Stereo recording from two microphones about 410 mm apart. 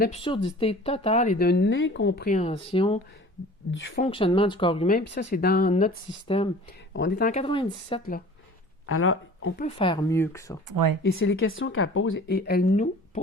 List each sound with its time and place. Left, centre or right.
0.0 s speech: centre
3.7 s speech: left
4.0 s speech: centre
8.9 s speech: left
9.6 s speech: centre
10.7 s speech: right
11.0 s speech: left